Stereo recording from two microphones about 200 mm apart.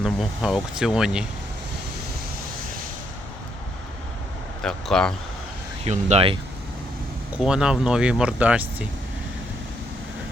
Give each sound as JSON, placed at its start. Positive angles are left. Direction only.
{"t": 0.0, "sound": "speech", "side_deg": 0}
{"t": 4.6, "sound": "speech", "side_deg": 5}
{"t": 5.8, "sound": "speech", "side_deg": -30}
{"t": 7.3, "sound": "speech", "side_deg": -5}